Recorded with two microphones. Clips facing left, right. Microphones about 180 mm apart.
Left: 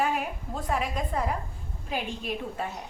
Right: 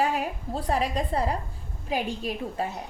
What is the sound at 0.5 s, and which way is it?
A woman's voice, 35° right (ahead or behind).